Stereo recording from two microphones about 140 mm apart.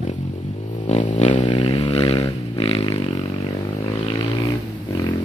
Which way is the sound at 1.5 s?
40° left (ahead or behind).